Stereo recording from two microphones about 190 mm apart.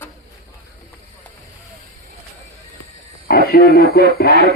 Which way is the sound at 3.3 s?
50° left (ahead or behind).